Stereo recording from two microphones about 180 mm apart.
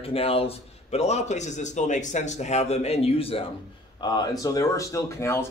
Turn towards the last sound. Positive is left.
turn(degrees=15)  # may be behind; listen again after turning